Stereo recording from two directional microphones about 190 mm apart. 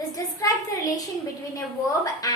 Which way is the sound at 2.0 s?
20° left (ahead or behind).